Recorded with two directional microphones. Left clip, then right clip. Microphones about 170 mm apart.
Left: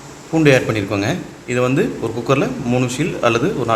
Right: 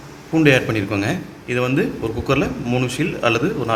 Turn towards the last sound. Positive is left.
turn(degrees=5)  # may be behind; listen again after turning